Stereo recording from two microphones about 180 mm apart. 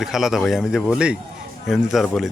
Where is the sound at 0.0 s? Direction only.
Centre (ahead or behind).